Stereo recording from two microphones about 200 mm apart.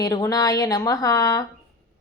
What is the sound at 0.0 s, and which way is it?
A woman's voice, 20° left (ahead or behind).